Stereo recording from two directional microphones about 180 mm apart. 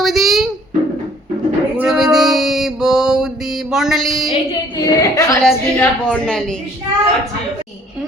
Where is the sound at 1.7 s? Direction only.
5° right (ahead or behind).